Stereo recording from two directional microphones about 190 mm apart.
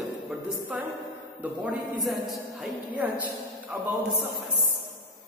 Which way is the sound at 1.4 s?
5° right (ahead or behind).